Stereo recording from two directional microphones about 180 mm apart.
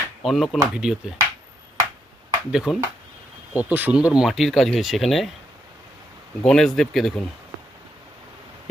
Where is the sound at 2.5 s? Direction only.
5° right (ahead or behind).